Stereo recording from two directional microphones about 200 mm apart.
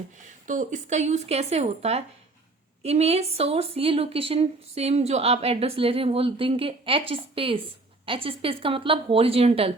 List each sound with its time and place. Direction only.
0.2 s a woman's voice: 40° right (ahead or behind)